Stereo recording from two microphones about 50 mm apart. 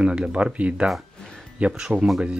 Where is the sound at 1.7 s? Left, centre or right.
Centre.